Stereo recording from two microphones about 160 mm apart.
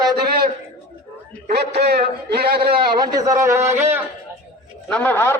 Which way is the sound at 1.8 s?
90° right.